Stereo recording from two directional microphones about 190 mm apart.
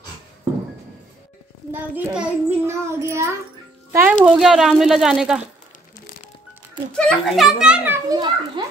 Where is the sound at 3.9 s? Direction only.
10° right (ahead or behind).